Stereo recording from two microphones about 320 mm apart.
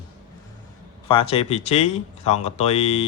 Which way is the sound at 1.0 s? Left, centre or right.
Centre.